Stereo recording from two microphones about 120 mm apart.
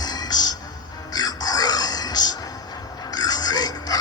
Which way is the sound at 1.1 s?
35° left (ahead or behind).